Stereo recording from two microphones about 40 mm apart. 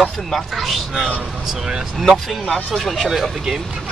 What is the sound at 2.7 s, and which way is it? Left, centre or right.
Speech, centre.